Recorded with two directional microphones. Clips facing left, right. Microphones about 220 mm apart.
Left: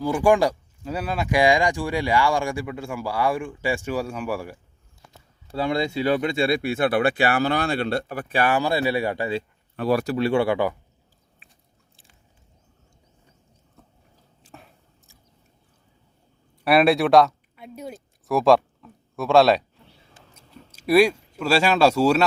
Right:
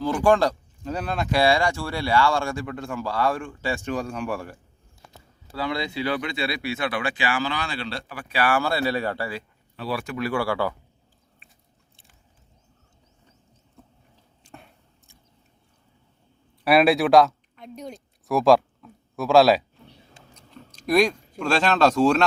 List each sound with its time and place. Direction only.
0.0 s speech: 15° left (ahead or behind)
5.5 s speech: 25° left (ahead or behind)
5.7 s speech: 45° left (ahead or behind)
8.0 s speech: 40° left (ahead or behind)
8.4 s speech: 20° left (ahead or behind)
9.7 s speech: 45° left (ahead or behind); by 10.8 s 20° left (ahead or behind)
11.4 s biting: centre (ahead or behind)
14.4 s biting: centre (ahead or behind)
16.6 s speech: centre (ahead or behind)